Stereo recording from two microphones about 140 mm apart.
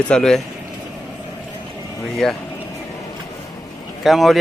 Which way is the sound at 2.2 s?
5° left (ahead or behind).